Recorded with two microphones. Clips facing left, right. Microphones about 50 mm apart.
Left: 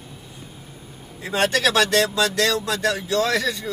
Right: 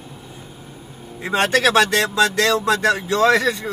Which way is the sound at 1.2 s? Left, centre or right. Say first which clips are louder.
Right 3 dB; right.